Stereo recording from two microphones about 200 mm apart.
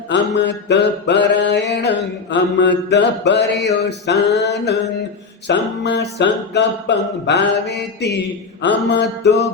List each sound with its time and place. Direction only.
0.1 s music: 60° left (ahead or behind)